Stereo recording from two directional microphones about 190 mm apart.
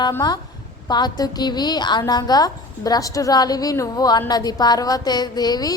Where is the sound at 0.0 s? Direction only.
20° left (ahead or behind).